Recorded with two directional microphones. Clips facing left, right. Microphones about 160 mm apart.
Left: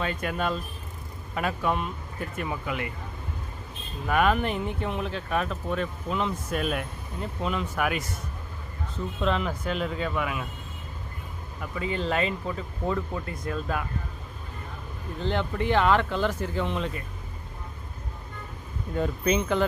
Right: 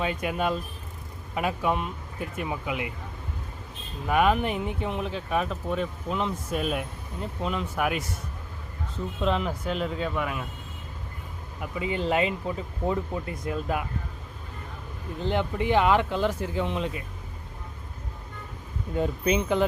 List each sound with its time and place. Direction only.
0.0 s speech: 10° right (ahead or behind)
4.0 s speech: 5° right (ahead or behind)
9.2 s speech: 5° right (ahead or behind)
11.6 s speech: 15° right (ahead or behind)
15.2 s speech: 10° right (ahead or behind)
18.9 s speech: 5° right (ahead or behind)